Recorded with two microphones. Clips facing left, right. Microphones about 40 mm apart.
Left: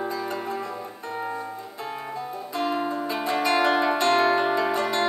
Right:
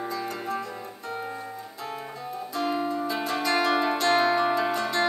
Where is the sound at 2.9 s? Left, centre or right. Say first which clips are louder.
Even; left.